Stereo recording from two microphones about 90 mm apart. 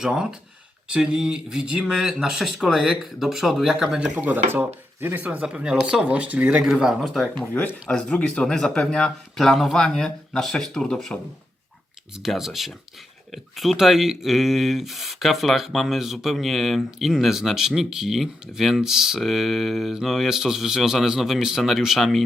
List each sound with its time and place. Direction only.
0.0 s speech: 5° right (ahead or behind)
7.5 s speech: 20° left (ahead or behind)
8.1 s speech: 10° left (ahead or behind)
12.1 s speech: 5° right (ahead or behind)